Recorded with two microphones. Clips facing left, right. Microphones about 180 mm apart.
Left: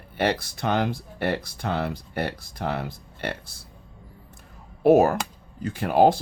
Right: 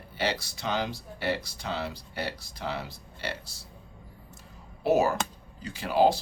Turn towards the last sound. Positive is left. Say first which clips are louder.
# left 5 dB
turn(degrees=55)  # may be behind; listen again after turning